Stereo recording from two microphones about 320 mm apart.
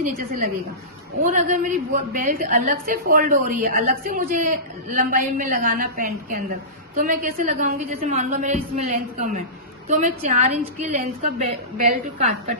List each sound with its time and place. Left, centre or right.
0.0 s a woman's voice: right